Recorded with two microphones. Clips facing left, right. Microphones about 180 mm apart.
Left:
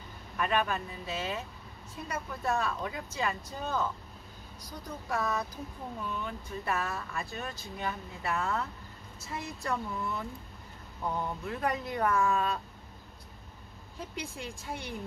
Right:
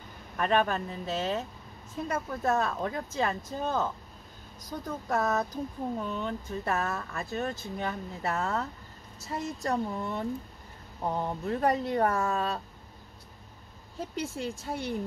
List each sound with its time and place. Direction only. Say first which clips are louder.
0.4 s speech: right 4 dB; 40° right (ahead or behind)
13.9 s speech: right 6 dB; 40° right (ahead or behind)